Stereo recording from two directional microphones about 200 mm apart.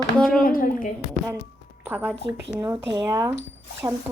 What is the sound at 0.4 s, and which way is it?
Speech, 45° left (ahead or behind).